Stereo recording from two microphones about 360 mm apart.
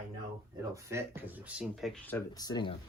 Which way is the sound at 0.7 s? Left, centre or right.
Centre.